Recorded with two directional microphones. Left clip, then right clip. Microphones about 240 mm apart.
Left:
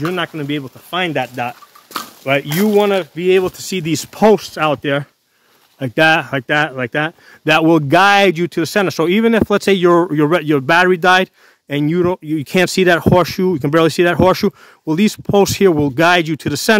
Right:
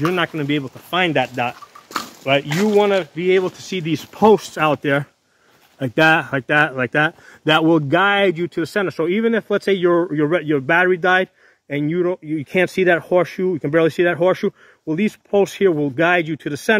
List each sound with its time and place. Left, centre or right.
0.0 s speech: centre
2.3 s speech: left
2.6 s speech: left
4.4 s speech: centre; by 16.7 s left